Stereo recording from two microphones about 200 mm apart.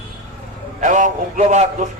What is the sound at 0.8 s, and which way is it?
A man's voice, 40° right (ahead or behind).